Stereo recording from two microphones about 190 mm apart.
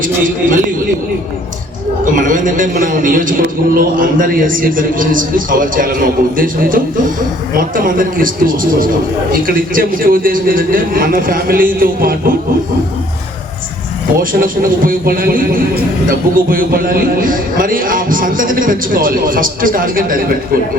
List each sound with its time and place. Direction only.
0.0 s speech: 45° right (ahead or behind)
2.1 s speech: 45° right (ahead or behind)
14.2 s speech: 50° right (ahead or behind)